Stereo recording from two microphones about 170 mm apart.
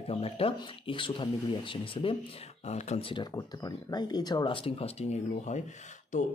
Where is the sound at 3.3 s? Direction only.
20° left (ahead or behind).